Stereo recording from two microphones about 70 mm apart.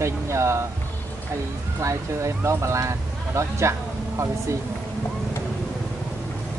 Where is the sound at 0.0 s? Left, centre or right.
Right.